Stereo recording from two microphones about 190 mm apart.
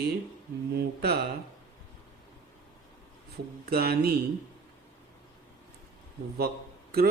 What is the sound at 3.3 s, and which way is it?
Speech, 55° right (ahead or behind).